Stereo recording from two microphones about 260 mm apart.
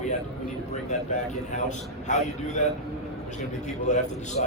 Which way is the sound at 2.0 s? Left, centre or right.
Left.